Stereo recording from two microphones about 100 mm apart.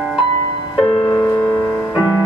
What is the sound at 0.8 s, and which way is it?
Music, 35° left (ahead or behind).